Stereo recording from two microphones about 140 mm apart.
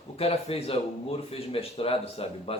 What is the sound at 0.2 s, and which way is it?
Speech, 45° left (ahead or behind).